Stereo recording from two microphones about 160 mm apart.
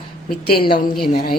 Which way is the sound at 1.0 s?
70° left (ahead or behind).